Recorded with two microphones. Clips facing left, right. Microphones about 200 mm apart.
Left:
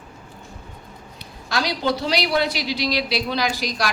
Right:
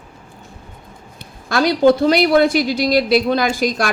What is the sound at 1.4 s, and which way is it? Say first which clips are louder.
A man's voice: right 10 dB; 50° right (ahead or behind).